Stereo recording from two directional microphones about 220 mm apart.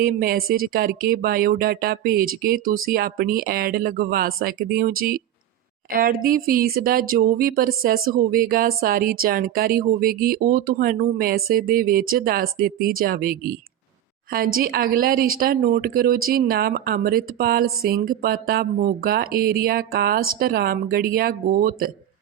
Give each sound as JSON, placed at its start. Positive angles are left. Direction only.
{"t": 0.0, "sound": "speech", "side_deg": -45}
{"t": 14.3, "sound": "speech", "side_deg": -40}